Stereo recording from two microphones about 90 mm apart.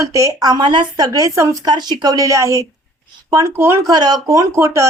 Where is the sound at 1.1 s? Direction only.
40° right (ahead or behind).